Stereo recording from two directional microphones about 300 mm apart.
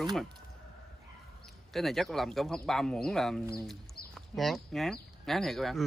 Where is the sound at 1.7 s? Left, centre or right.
Centre.